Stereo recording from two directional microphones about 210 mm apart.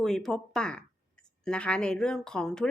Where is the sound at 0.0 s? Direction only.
Centre (ahead or behind).